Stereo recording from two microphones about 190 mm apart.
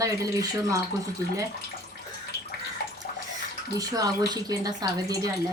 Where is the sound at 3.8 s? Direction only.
20° right (ahead or behind).